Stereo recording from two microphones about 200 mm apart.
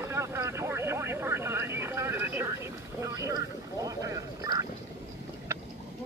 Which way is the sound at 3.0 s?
15° right (ahead or behind).